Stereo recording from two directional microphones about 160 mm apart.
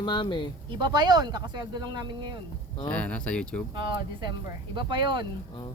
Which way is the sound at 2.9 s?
5° left (ahead or behind).